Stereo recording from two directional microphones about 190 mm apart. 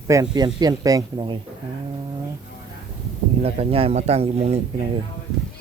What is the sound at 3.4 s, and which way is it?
A man's voice, 30° right (ahead or behind).